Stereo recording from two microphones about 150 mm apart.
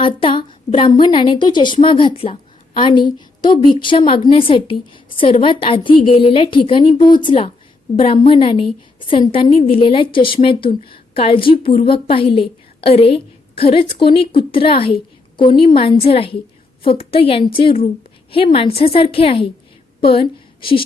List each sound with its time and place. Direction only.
0.0 s a woman's voice: 35° left (ahead or behind)